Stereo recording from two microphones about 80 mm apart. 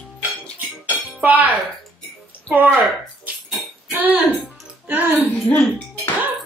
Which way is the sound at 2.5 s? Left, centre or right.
Right.